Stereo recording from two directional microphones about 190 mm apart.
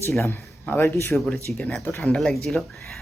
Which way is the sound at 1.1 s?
Centre (ahead or behind).